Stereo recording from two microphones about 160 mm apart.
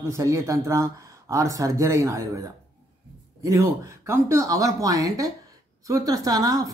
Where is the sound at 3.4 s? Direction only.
20° right (ahead or behind).